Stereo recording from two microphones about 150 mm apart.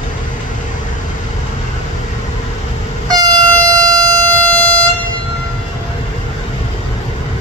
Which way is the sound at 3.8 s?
25° right (ahead or behind).